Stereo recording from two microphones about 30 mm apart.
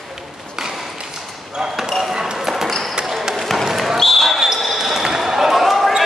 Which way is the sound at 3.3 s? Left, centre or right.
Centre.